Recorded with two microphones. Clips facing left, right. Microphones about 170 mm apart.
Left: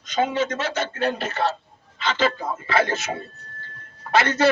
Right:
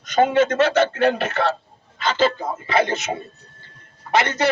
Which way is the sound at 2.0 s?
30° right (ahead or behind).